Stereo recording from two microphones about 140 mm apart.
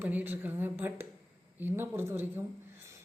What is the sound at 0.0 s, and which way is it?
A woman's voice, 15° right (ahead or behind).